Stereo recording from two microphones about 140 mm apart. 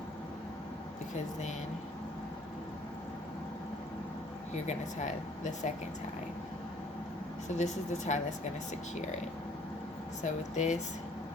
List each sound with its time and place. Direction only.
4.5 s speech: 60° left (ahead or behind)
7.6 s speech: 55° left (ahead or behind)
10.2 s speech: 60° left (ahead or behind)